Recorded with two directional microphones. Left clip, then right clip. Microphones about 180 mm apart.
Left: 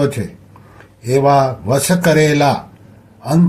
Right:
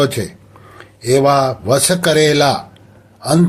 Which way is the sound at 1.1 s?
20° right (ahead or behind).